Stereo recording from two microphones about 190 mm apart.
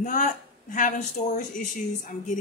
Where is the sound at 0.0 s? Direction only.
45° left (ahead or behind).